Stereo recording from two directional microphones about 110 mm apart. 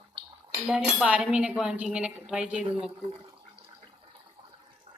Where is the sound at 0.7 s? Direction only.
10° right (ahead or behind).